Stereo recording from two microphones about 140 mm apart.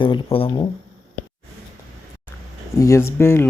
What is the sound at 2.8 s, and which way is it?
Speech, 20° left (ahead or behind).